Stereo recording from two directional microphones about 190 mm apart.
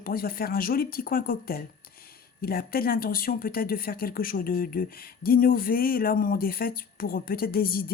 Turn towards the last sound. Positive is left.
turn(degrees=50)  # may be behind; listen again after turning